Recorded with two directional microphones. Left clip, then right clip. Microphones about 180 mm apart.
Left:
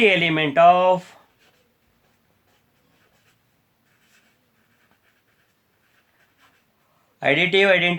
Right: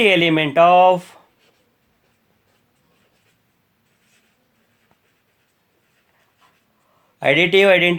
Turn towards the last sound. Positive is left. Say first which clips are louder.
# right 4 dB
turn(degrees=-35)  # may be behind; listen again after turning